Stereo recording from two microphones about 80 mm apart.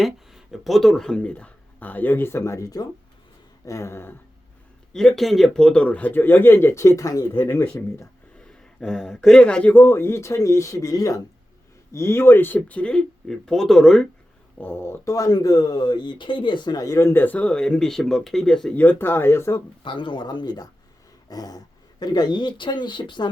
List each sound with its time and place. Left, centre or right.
0.0 s speech: centre; by 4.1 s left
4.9 s a man's voice: centre; by 7.3 s left
7.8 s speech: left
8.4 s a sound: centre
9.4 s speech: centre; by 11.2 s left
11.9 s speech: left; by 14.1 s centre
14.6 s a man's voice: left
15.0 s speech: left
16.8 s speech: left
17.2 s speech: left; by 18.7 s centre
18.7 s a man's voice: centre
19.8 s speech: left